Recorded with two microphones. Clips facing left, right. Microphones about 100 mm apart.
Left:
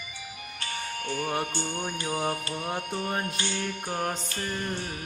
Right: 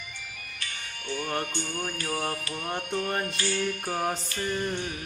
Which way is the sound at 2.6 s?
Centre (ahead or behind).